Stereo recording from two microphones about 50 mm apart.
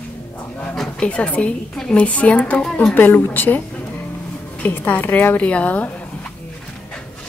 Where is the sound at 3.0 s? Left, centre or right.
Left.